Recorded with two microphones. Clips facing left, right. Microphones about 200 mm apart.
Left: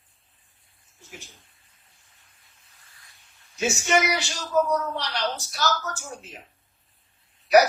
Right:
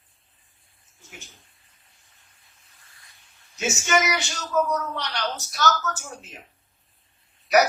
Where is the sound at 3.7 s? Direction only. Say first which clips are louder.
Even; 30° left (ahead or behind).